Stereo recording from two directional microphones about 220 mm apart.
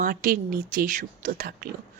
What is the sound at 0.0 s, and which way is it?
Speech, 40° right (ahead or behind).